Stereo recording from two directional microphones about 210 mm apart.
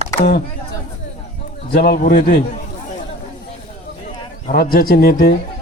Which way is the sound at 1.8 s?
45° left (ahead or behind).